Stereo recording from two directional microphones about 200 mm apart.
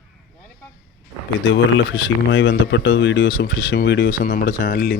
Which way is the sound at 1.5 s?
70° left (ahead or behind).